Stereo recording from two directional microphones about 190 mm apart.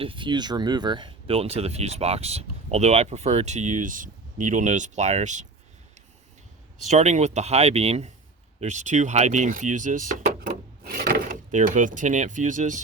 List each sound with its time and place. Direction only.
0.0 s speech: 25° right (ahead or behind)
6.8 s speech: 40° right (ahead or behind)